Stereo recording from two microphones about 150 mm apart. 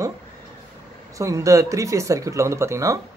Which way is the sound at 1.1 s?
20° right (ahead or behind).